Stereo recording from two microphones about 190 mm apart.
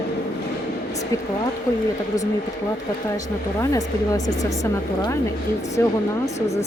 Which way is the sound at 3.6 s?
20° left (ahead or behind).